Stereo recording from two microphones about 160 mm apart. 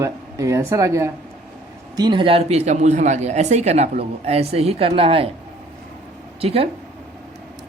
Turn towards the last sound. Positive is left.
turn(degrees=-35)  # may be behind; listen again after turning